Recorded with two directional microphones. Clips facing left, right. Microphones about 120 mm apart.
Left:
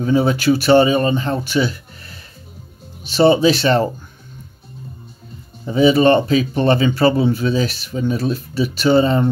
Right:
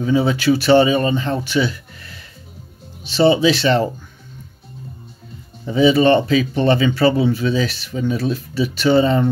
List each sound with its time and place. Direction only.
0.0 s speech: 45° left (ahead or behind)
5.7 s speech: 40° left (ahead or behind)